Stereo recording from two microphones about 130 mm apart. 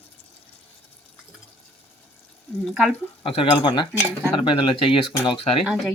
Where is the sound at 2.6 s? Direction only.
Centre (ahead or behind).